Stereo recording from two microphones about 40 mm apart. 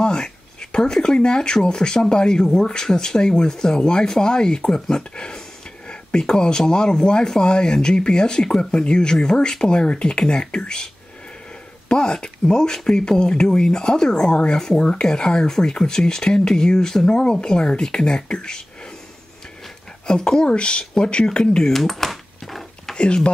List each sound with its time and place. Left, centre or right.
0.0 s speech: centre
11.9 s speech: left
20.1 s speech: centre
21.7 s dishes: centre
22.9 s speech: left